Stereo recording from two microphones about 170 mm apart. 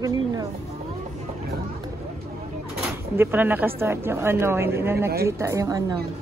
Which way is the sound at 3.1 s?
10° right (ahead or behind).